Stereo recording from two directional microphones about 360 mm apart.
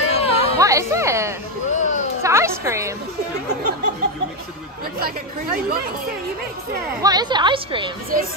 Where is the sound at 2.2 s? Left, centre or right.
Centre.